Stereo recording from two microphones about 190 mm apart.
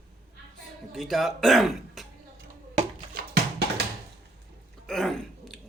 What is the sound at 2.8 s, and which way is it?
Music, 50° right (ahead or behind).